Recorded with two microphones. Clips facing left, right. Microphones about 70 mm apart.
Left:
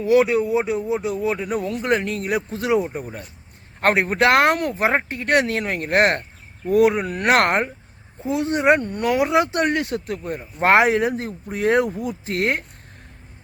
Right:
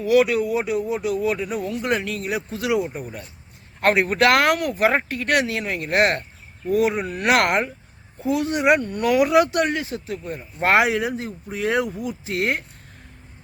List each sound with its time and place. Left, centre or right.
0.0 s speech: left
1.5 s speech: left
2.5 s speech: left
7.3 s speech: left
9.6 s speech: left